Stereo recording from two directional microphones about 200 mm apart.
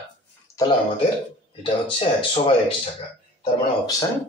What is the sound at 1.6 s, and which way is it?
Speech, 25° left (ahead or behind).